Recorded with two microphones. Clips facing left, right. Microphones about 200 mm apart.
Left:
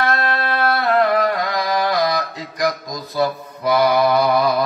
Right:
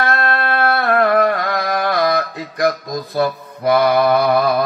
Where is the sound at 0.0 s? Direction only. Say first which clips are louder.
Right 1 dB; 55° right (ahead or behind).